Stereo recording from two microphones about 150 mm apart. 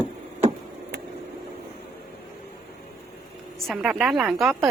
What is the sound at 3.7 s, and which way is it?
Speech, 5° right (ahead or behind).